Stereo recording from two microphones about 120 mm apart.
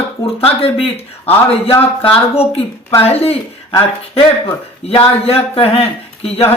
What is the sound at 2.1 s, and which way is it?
Speech, 55° left (ahead or behind).